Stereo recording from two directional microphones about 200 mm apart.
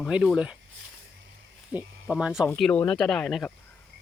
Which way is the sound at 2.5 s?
5° left (ahead or behind).